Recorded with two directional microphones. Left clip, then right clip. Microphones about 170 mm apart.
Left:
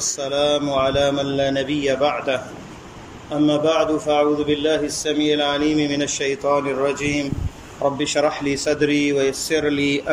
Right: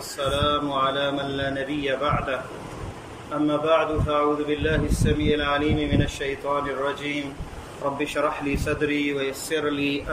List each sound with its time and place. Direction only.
0.2 s a man's voice: 35° left (ahead or behind)
3.4 s a man's voice: 30° left (ahead or behind)
8.0 s a man's voice: 20° left (ahead or behind)